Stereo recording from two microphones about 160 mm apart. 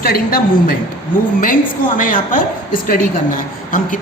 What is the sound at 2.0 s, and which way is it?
Speech, 55° left (ahead or behind).